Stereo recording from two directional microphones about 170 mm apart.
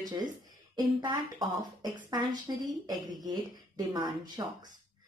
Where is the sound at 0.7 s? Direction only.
25° right (ahead or behind).